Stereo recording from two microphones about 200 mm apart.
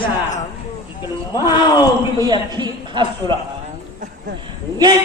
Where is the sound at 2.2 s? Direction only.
20° right (ahead or behind).